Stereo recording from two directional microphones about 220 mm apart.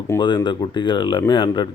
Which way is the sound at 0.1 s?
15° left (ahead or behind).